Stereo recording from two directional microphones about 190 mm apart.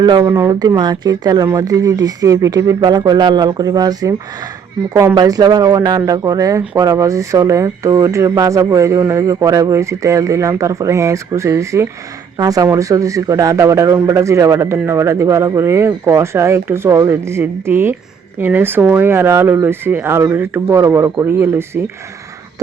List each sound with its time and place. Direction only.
0.0 s speech: 20° right (ahead or behind)